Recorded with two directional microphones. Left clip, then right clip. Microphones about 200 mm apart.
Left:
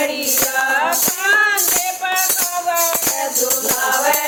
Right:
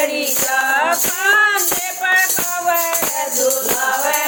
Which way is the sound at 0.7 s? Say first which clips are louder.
Right 1 dB; 40° right (ahead or behind).